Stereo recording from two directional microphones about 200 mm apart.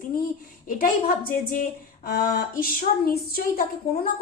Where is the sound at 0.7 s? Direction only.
45° left (ahead or behind).